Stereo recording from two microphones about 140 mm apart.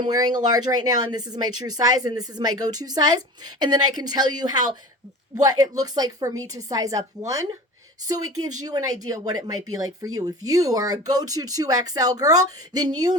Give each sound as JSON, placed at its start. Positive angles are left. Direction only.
{"t": 0.0, "sound": "speech", "side_deg": -30}
{"t": 8.0, "sound": "speech", "side_deg": -25}